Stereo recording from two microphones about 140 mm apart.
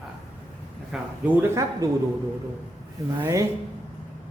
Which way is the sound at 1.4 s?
20° right (ahead or behind).